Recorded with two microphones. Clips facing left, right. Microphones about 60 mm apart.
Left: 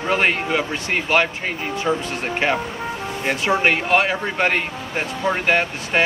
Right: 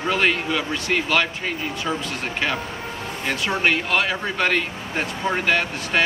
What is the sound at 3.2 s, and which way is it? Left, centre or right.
Speech, left.